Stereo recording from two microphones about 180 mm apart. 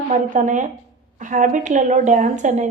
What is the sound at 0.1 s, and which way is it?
A woman's voice, 45° right (ahead or behind).